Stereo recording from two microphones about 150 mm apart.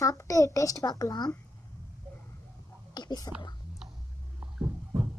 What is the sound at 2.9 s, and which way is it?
Whispering, 25° left (ahead or behind).